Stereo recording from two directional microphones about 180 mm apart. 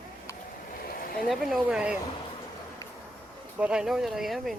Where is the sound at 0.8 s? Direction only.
55° left (ahead or behind).